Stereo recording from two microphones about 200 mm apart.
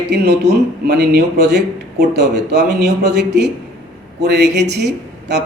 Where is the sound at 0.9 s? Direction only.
55° right (ahead or behind).